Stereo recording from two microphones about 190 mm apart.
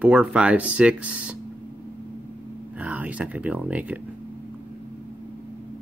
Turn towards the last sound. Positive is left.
turn(degrees=-5)  # may be behind; listen again after turning